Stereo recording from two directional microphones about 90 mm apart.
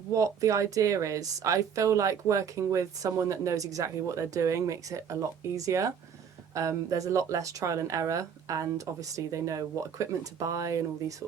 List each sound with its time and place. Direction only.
0.1 s speech: 35° right (ahead or behind)